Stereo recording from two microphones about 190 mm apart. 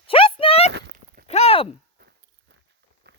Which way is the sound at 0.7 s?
60° right (ahead or behind).